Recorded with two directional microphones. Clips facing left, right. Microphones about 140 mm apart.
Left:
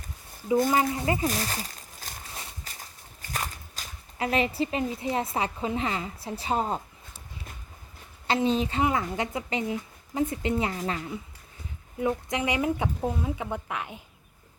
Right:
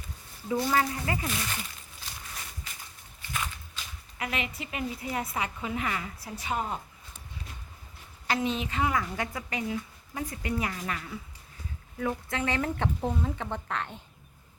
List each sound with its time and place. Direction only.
0.7 s speech: 20° left (ahead or behind)
1.3 s a sound: 35° left (ahead or behind)
2.3 s walk: 40° left (ahead or behind)
4.9 s speech: 25° left (ahead or behind)
8.3 s speech: 30° left (ahead or behind); by 14.0 s 10° left (ahead or behind)